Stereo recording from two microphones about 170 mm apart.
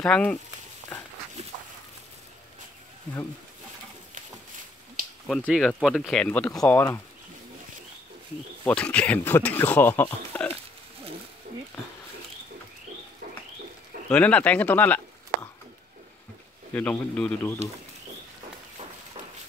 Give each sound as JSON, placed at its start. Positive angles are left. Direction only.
{"t": 0.0, "sound": "speech", "side_deg": 5}
{"t": 5.2, "sound": "speech", "side_deg": 5}
{"t": 8.6, "sound": "speech", "side_deg": 5}
{"t": 10.3, "sound": "pig", "side_deg": 10}
{"t": 14.1, "sound": "speech", "side_deg": 10}
{"t": 16.7, "sound": "speech", "side_deg": 10}